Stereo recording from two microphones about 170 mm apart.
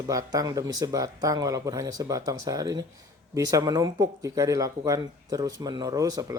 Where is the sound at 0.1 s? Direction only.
20° right (ahead or behind).